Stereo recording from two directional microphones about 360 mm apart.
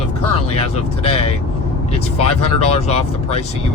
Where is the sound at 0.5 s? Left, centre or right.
Centre.